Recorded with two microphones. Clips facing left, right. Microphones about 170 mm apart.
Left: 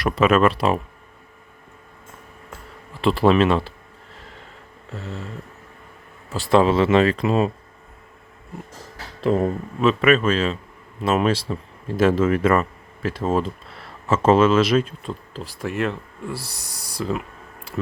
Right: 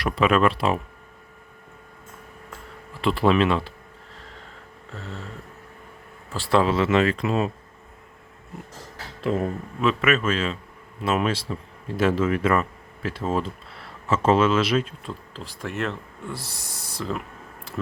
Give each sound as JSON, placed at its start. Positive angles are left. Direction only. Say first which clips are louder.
{"t": 0.0, "sound": "speech", "louder": "left 3 dB", "side_deg": 45}
{"t": 3.0, "sound": "speech", "louder": "left 3 dB", "side_deg": 35}
{"t": 6.3, "sound": "speech", "louder": "left 4 dB", "side_deg": 20}
{"t": 9.2, "sound": "speech", "louder": "left 5 dB", "side_deg": 35}
{"t": 15.3, "sound": "speech", "louder": "left 5 dB", "side_deg": 10}